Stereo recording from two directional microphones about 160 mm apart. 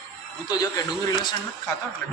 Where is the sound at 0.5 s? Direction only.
25° left (ahead or behind).